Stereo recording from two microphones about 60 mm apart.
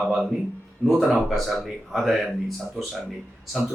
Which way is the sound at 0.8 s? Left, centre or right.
Centre.